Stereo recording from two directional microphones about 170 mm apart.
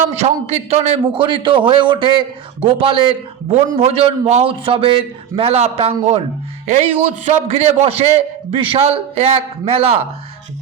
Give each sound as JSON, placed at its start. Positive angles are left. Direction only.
{"t": 0.1, "sound": "a man's voice", "side_deg": -40}